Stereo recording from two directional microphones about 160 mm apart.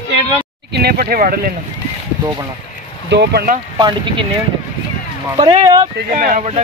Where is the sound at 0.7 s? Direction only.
80° right.